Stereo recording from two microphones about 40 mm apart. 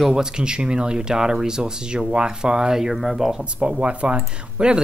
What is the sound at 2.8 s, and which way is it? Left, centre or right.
Speech, centre.